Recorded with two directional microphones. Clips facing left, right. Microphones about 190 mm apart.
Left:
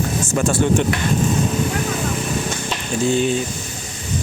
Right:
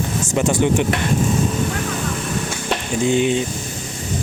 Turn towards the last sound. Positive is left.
turn(degrees=-20)  # may be behind; listen again after turning